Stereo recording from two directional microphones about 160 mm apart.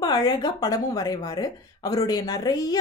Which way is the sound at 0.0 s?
25° left (ahead or behind).